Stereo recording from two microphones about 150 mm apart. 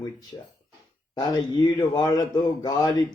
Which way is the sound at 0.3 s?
25° left (ahead or behind).